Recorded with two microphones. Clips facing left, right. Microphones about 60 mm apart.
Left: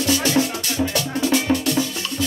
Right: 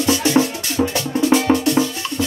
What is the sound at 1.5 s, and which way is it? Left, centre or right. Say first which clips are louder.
Music: right 4 dB; right.